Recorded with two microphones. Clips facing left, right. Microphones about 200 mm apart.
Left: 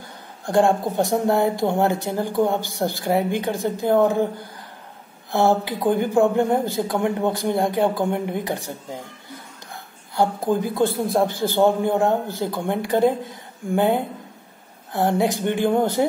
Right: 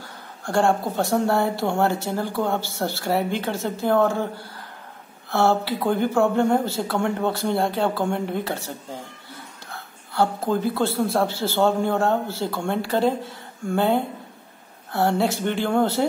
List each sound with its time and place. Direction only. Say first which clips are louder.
0.4 s speech: left 3 dB; 20° left (ahead or behind)